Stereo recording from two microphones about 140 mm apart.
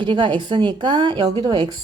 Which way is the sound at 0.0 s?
35° right (ahead or behind).